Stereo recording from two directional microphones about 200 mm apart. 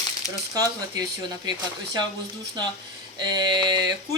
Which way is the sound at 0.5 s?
20° right (ahead or behind).